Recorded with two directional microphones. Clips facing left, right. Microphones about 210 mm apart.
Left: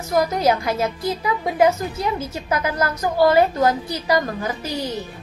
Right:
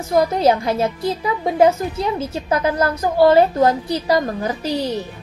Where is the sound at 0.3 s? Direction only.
30° right (ahead or behind).